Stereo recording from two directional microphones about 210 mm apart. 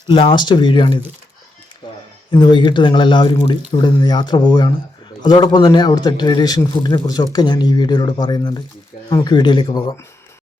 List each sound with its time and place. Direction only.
0.1 s a man's voice: 25° left (ahead or behind)
2.3 s a man's voice: 20° left (ahead or behind)